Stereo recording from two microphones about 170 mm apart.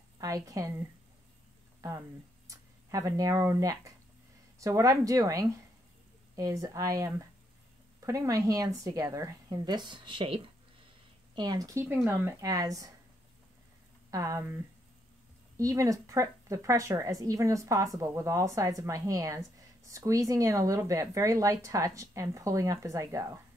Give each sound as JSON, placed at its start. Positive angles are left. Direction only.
{"t": 0.2, "sound": "a woman's voice", "side_deg": -20}
{"t": 2.4, "sound": "speech", "side_deg": -20}
{"t": 14.1, "sound": "speech", "side_deg": -15}
{"t": 15.5, "sound": "speech", "side_deg": -20}